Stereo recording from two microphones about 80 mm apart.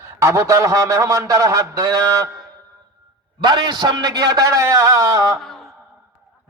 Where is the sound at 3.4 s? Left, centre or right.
Right.